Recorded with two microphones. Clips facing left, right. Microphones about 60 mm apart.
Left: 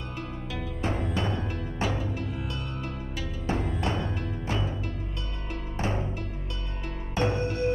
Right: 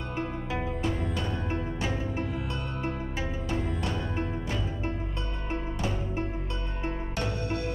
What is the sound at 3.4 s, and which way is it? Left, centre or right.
Music, left.